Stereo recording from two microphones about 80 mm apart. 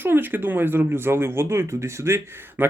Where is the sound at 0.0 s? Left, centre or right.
Right.